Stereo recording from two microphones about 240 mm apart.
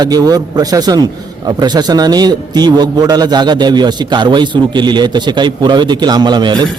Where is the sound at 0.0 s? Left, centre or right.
Centre.